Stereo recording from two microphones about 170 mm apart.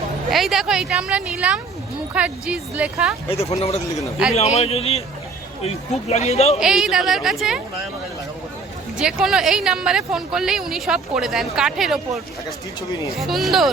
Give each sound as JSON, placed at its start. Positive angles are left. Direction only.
{"t": 0.3, "sound": "speech", "side_deg": 0}
{"t": 3.2, "sound": "speech", "side_deg": 35}
{"t": 6.6, "sound": "speech", "side_deg": 0}
{"t": 9.0, "sound": "speech", "side_deg": -5}